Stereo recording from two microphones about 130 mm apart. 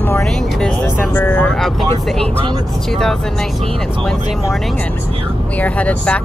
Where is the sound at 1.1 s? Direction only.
15° left (ahead or behind).